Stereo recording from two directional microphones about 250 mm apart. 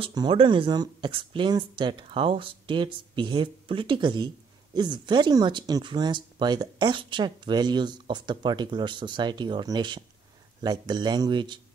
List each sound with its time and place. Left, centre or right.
0.0 s speech: centre